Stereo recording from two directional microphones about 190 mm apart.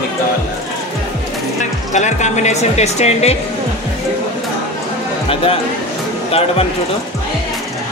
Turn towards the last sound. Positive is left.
turn(degrees=30)  # may be behind; listen again after turning